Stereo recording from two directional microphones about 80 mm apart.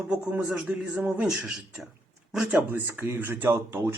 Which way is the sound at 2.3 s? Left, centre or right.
Centre.